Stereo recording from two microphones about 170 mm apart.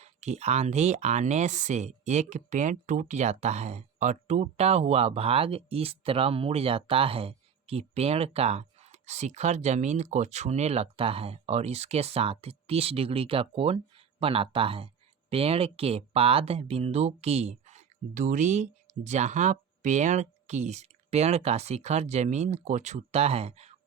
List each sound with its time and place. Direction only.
0.0 s speech: 40° right (ahead or behind)